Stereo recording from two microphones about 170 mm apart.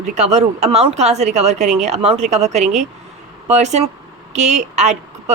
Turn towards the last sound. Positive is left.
turn(degrees=-45)  # may be behind; listen again after turning